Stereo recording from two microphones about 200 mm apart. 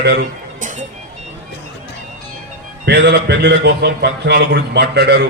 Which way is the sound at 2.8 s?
55° right (ahead or behind).